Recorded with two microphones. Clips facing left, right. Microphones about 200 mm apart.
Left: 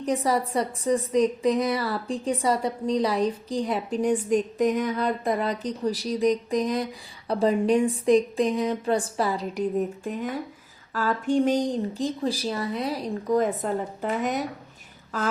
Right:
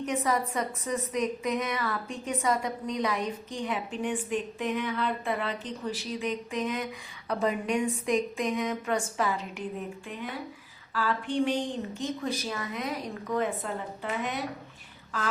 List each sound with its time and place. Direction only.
0.0 s a woman's voice: 35° left (ahead or behind)